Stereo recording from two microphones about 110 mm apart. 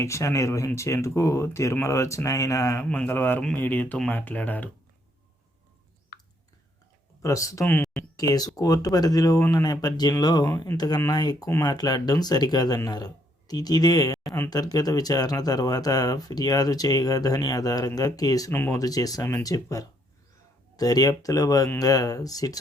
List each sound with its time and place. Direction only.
0.0 s speech: 25° left (ahead or behind)
2.9 s speech: 15° left (ahead or behind)
7.2 s speech: 30° left (ahead or behind)
7.6 s speech: 15° left (ahead or behind)
8.1 s speech: 35° left (ahead or behind)
18.5 s speech: 20° left (ahead or behind)
18.8 s speech: 35° left (ahead or behind)